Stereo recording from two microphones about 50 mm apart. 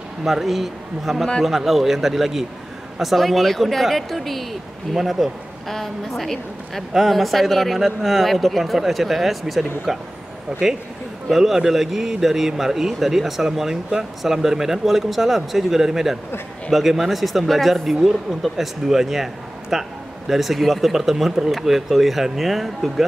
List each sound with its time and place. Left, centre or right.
0.2 s speech: centre